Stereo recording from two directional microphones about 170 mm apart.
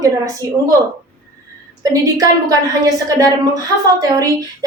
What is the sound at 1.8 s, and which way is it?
A woman's voice, 20° right (ahead or behind).